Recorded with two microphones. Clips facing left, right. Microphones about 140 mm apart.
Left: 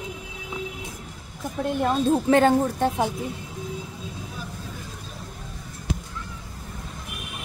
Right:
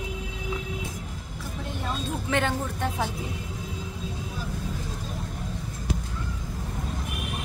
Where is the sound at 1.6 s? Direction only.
55° left (ahead or behind).